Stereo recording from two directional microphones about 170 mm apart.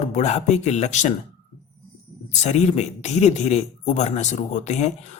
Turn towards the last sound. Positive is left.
turn(degrees=45)  # may be behind; listen again after turning